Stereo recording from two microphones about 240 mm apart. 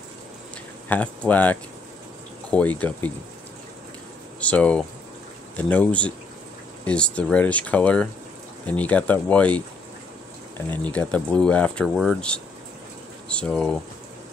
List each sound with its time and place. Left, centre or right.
0.8 s speech: centre
4.4 s speech: centre
10.7 s speech: centre